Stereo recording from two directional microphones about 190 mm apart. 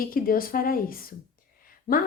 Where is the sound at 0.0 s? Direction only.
50° left (ahead or behind).